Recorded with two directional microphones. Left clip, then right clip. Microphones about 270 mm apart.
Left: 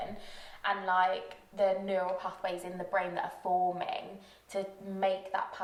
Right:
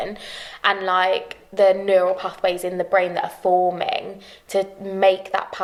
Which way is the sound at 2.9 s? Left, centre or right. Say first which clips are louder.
Right 12 dB; right.